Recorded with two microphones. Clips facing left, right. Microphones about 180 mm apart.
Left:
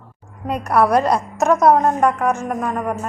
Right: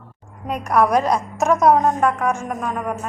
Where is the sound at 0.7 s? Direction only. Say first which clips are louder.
Left 1 dB; 10° left (ahead or behind).